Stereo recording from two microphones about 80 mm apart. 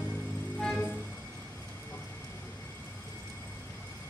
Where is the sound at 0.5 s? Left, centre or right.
Centre.